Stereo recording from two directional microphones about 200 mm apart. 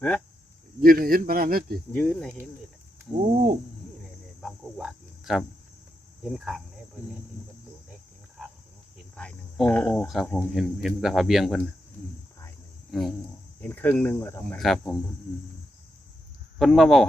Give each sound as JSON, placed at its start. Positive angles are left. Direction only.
{"t": 0.8, "sound": "speech", "side_deg": -45}
{"t": 1.9, "sound": "speech", "side_deg": 5}
{"t": 3.3, "sound": "speech", "side_deg": -45}
{"t": 4.4, "sound": "speech", "side_deg": 0}
{"t": 9.1, "sound": "speech", "side_deg": 5}
{"t": 12.9, "sound": "speech", "side_deg": 0}
{"t": 16.6, "sound": "speech", "side_deg": 0}